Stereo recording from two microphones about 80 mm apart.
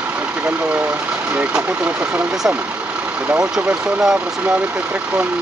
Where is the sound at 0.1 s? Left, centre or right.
Centre.